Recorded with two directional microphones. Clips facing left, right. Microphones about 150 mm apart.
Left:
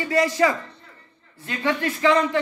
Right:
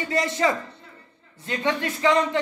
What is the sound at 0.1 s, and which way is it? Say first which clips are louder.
Speech: left 3 dB; 25° right (ahead or behind).